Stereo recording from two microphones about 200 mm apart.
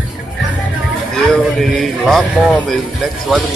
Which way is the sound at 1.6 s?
Centre (ahead or behind).